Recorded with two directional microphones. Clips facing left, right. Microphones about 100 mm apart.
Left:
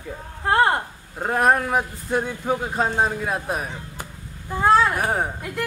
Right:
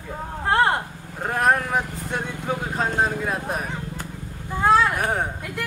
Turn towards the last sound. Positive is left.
turn(degrees=5)  # may be behind; listen again after turning